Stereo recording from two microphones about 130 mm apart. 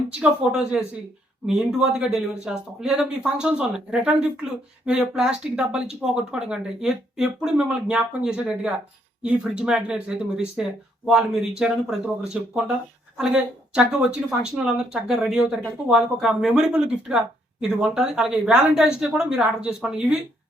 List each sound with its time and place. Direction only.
0.1 s speech: 5° right (ahead or behind)